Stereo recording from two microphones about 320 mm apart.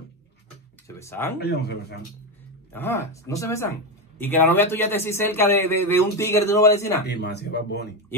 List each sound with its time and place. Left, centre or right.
0.8 s speech: centre
1.4 s speech: left
2.7 s a man's voice: centre
7.1 s speech: left